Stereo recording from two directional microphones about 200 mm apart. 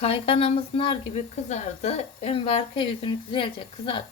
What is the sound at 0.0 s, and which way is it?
Speech, 30° left (ahead or behind).